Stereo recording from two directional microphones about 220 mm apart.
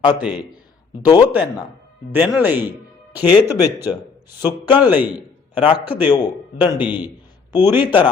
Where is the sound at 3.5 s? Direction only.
15° left (ahead or behind).